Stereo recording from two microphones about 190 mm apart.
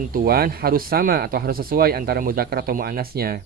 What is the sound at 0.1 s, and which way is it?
Speech, 55° right (ahead or behind).